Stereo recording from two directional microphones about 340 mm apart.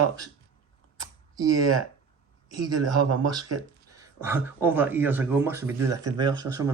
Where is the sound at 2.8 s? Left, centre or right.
Right.